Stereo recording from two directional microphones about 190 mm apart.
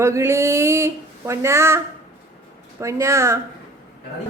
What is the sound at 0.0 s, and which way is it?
Speech, 15° right (ahead or behind).